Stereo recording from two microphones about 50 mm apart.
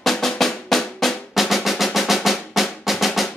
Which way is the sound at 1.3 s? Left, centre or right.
Centre.